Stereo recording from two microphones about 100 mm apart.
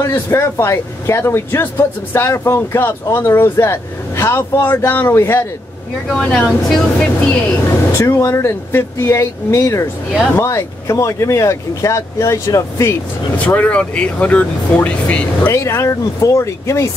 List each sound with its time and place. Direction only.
0.0 s speech: 25° left (ahead or behind)
6.0 s speech: 10° left (ahead or behind)
8.0 s speech: 30° left (ahead or behind)
13.5 s speech: 15° left (ahead or behind)
15.5 s speech: 30° left (ahead or behind)